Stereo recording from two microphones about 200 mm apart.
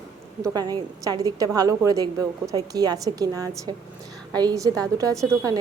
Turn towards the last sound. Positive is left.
turn(degrees=-15)  # may be behind; listen again after turning